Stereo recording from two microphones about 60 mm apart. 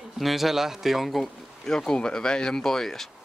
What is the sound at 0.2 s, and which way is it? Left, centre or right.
Speech, centre.